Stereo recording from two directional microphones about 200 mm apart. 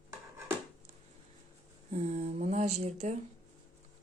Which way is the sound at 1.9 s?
35° right (ahead or behind).